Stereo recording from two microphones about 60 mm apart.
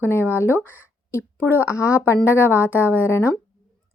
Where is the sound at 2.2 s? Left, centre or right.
Left.